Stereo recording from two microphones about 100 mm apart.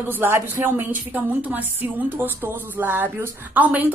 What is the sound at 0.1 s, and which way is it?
A woman's voice, 20° right (ahead or behind).